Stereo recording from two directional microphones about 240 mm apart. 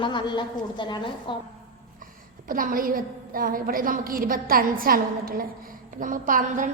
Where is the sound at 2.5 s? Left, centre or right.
Right.